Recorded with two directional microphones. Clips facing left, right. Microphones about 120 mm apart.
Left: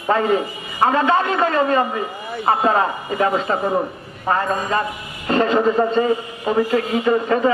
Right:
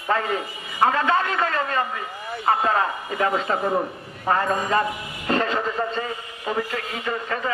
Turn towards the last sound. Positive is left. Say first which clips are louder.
# left 10 dB
turn(degrees=20)  # may be behind; listen again after turning